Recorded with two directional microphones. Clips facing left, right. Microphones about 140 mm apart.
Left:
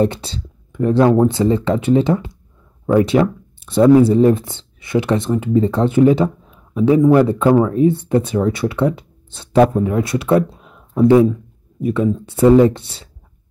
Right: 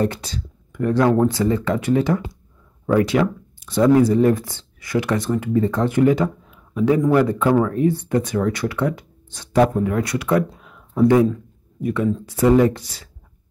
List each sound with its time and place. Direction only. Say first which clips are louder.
0.0 s speech: left 4 dB; 30° left (ahead or behind)
10.5 s a sound: left 3 dB; 25° left (ahead or behind)
11.8 s speech: left 3 dB; 25° left (ahead or behind)